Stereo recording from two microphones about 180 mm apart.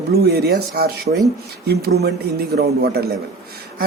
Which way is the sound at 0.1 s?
60° right (ahead or behind).